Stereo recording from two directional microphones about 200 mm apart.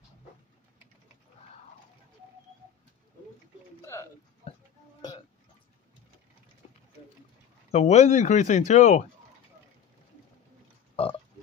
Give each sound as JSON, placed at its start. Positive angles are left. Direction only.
{"t": 3.8, "sound": "a sound", "side_deg": 15}
{"t": 7.7, "sound": "speech", "side_deg": 35}
{"t": 11.0, "sound": "burping", "side_deg": 30}